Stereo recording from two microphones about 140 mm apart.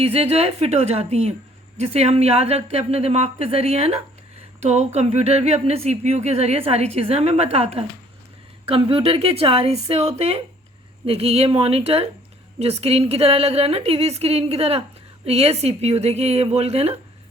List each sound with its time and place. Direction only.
0.0 s a woman's voice: 45° right (ahead or behind)